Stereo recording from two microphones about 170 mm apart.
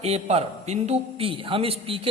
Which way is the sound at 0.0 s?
40° right (ahead or behind).